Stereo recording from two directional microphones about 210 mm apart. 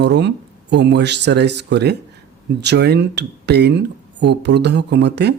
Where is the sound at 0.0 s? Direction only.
55° right (ahead or behind).